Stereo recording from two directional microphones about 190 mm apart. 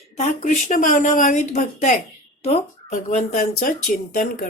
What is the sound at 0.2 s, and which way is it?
Speech, 40° left (ahead or behind).